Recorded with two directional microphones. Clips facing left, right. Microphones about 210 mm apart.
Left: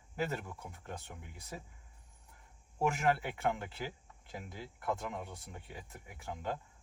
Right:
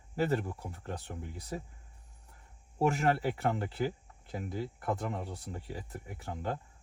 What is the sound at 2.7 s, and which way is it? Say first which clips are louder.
Speech: right 3 dB; 35° right (ahead or behind).